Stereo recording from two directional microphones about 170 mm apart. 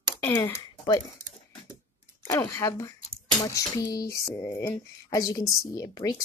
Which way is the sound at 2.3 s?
15° left (ahead or behind).